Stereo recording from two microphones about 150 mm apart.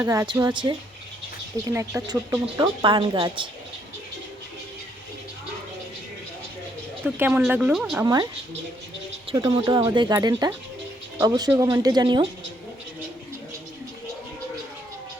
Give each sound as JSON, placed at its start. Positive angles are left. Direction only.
{"t": 0.0, "sound": "speech", "side_deg": -20}
{"t": 0.3, "sound": "a woman's voice", "side_deg": -30}
{"t": 1.6, "sound": "speech", "side_deg": -20}
{"t": 2.8, "sound": "a woman's voice", "side_deg": -35}
{"t": 7.0, "sound": "speech", "side_deg": -10}
{"t": 8.0, "sound": "speech", "side_deg": -25}
{"t": 9.3, "sound": "speech", "side_deg": -25}